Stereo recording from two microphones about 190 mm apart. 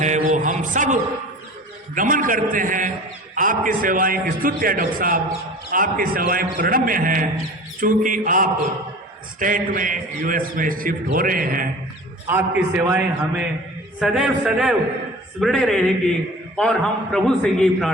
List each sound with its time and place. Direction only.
0.0 s a sound: 40° right (ahead or behind)
2.0 s a man's voice: 45° right (ahead or behind)
12.3 s a man's voice: 10° right (ahead or behind)